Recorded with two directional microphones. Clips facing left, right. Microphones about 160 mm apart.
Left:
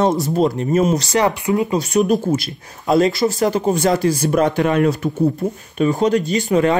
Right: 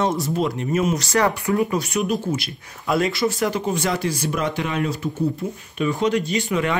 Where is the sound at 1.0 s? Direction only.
20° left (ahead or behind).